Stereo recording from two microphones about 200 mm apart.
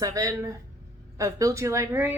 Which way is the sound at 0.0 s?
15° right (ahead or behind).